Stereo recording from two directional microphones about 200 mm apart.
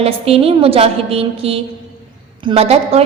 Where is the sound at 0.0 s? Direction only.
30° right (ahead or behind).